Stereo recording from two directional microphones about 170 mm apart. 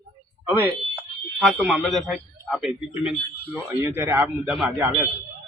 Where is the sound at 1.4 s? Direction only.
Centre (ahead or behind).